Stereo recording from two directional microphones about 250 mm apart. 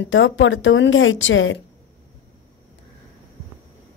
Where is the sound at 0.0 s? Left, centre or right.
Left.